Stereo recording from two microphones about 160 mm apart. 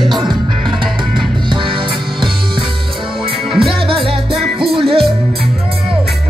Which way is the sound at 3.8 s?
35° right (ahead or behind).